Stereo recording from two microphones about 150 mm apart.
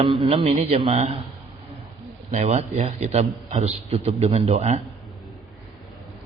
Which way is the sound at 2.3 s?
45° right (ahead or behind).